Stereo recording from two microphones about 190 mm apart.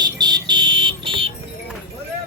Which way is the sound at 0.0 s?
20° right (ahead or behind).